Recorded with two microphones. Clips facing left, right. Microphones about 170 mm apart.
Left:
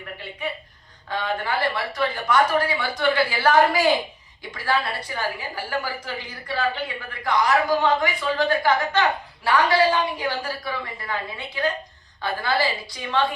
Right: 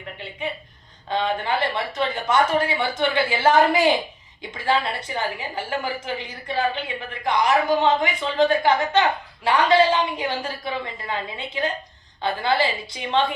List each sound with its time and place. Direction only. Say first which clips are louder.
0.0 s a woman's voice: right 1 dB; 20° right (ahead or behind)